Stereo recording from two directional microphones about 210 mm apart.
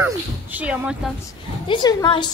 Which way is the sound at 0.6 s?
5° right (ahead or behind).